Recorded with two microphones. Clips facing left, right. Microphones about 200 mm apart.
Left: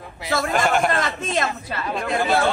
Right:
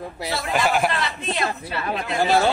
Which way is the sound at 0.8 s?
45° left (ahead or behind).